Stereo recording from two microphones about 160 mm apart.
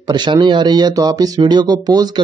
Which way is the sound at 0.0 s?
25° right (ahead or behind).